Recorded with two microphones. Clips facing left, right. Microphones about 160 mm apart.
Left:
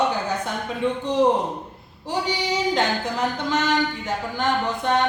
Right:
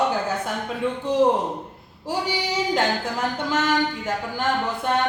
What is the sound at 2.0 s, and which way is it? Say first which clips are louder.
Speech: left 1 dB; 5° right (ahead or behind).